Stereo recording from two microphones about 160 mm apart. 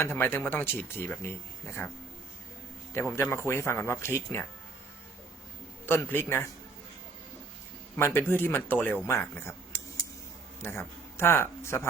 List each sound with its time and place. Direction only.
0.0 s speech: 15° left (ahead or behind)
2.9 s speech: 15° left (ahead or behind)
5.8 s speech: 15° left (ahead or behind)
7.9 s speech: 15° left (ahead or behind)
10.6 s speech: 15° left (ahead or behind)